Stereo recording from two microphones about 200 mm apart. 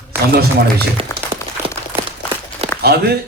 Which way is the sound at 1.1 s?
15° left (ahead or behind).